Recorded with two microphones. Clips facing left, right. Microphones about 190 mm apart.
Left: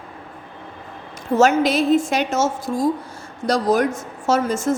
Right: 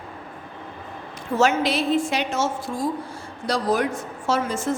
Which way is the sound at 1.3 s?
45° left (ahead or behind).